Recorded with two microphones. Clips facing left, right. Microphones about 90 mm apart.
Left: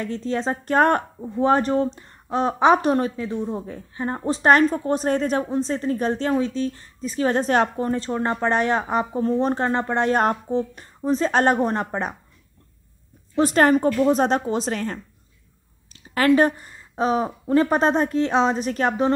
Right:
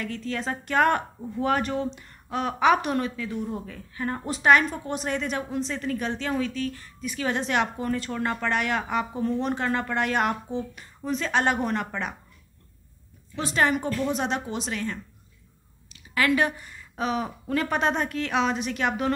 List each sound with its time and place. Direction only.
0.0 s a woman's voice: 30° left (ahead or behind)
1.2 s a woman's voice: 30° left (ahead or behind)
13.4 s a woman's voice: 45° left (ahead or behind)